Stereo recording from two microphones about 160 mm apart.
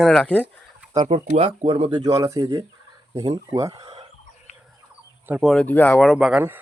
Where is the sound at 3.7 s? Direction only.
30° right (ahead or behind).